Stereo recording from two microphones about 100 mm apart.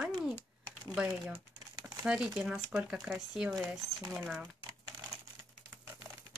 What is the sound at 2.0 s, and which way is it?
A woman's voice, 10° right (ahead or behind).